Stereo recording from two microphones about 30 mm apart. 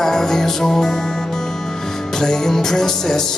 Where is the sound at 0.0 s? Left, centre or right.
Centre.